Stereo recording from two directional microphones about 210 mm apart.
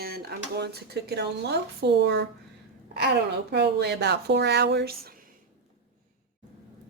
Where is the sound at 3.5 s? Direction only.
55° right (ahead or behind).